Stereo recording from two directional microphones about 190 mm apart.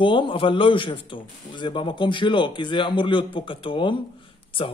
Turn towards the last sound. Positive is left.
turn(degrees=25)  # may be behind; listen again after turning